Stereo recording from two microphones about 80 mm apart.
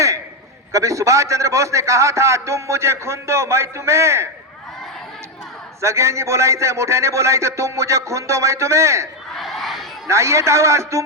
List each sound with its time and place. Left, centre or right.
0.7 s a man's voice: right
5.8 s a man's voice: right
9.3 s crowd: centre
10.1 s a man's voice: right